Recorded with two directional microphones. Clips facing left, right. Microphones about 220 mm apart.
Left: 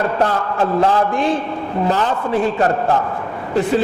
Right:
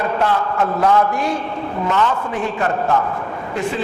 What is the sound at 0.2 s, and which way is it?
A man's voice, 35° left (ahead or behind).